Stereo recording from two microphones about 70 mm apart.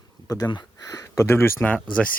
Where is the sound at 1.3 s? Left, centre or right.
Left.